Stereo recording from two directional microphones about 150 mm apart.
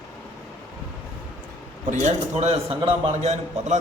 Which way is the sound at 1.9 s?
50° right (ahead or behind).